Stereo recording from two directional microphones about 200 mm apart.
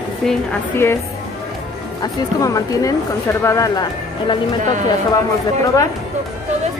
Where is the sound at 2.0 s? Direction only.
15° left (ahead or behind).